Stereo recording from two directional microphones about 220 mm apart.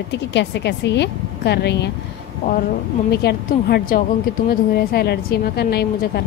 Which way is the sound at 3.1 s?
45° left (ahead or behind).